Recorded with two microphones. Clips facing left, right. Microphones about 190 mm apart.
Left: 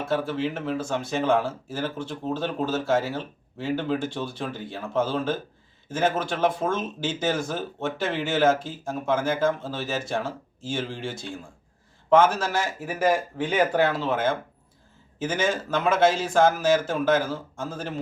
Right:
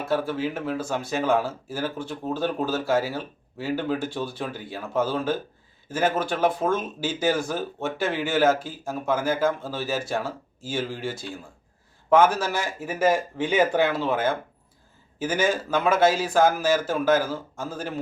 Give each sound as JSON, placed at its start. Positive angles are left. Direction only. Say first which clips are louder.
{"t": 0.0, "sound": "speech", "louder": "even", "side_deg": -10}
{"t": 13.4, "sound": "speech", "louder": "right 1 dB", "side_deg": -15}